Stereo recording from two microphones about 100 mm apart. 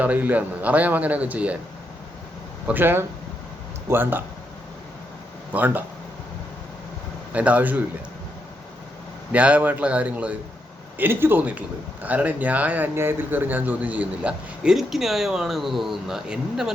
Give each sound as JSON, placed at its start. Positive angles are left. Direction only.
{"t": 0.0, "sound": "speech", "side_deg": -15}
{"t": 2.6, "sound": "speech", "side_deg": -20}
{"t": 5.5, "sound": "speech", "side_deg": -15}
{"t": 7.3, "sound": "speech", "side_deg": -15}
{"t": 9.3, "sound": "speech", "side_deg": -15}